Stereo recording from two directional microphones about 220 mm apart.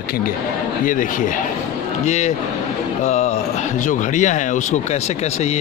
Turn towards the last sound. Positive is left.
turn(degrees=35)  # may be behind; listen again after turning